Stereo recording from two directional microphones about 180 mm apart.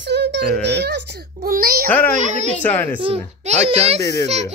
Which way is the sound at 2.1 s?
40° right (ahead or behind).